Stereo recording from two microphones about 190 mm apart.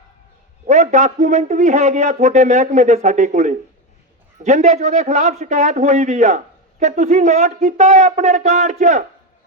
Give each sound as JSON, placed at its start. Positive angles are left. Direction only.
{"t": 0.7, "sound": "a man's voice", "side_deg": -40}